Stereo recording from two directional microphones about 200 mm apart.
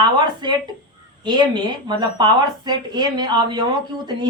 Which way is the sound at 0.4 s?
20° right (ahead or behind).